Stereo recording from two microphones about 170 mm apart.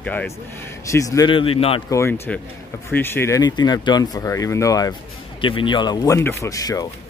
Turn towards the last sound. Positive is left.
turn(degrees=20)  # may be behind; listen again after turning